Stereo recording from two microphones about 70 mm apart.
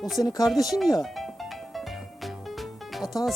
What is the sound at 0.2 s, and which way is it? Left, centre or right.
Speech, left.